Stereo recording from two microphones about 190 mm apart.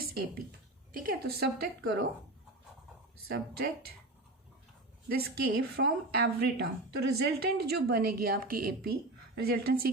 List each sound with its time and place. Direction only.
0.9 s a woman's voice: 50° right (ahead or behind)
1.8 s a woman's voice: 60° right (ahead or behind)
3.2 s a woman's voice: 55° right (ahead or behind)
5.0 s a woman's voice: 55° right (ahead or behind)